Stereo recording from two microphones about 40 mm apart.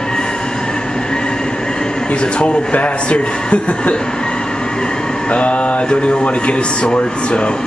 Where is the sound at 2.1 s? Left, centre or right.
Left.